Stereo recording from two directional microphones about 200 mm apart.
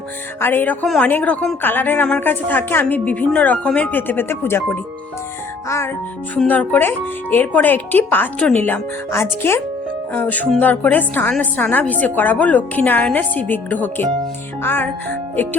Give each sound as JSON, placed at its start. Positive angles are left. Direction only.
{"t": 0.3, "sound": "a woman's voice", "side_deg": 10}